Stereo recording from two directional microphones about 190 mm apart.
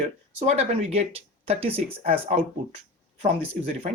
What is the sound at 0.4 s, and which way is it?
Speech, 35° right (ahead or behind).